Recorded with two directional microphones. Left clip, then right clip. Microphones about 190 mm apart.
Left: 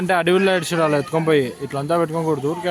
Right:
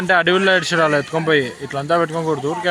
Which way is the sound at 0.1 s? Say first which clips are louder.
Right 3 dB; 20° left (ahead or behind).